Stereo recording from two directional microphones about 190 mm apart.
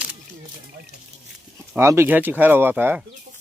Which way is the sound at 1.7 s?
15° right (ahead or behind).